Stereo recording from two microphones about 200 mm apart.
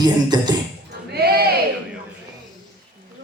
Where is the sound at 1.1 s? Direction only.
50° right (ahead or behind).